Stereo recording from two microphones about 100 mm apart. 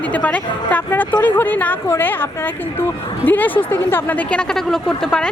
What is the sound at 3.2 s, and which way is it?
Speech, 20° left (ahead or behind).